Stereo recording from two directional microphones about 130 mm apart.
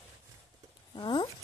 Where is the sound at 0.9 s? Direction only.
35° left (ahead or behind).